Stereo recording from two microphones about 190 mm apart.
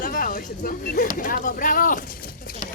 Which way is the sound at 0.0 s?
45° left (ahead or behind).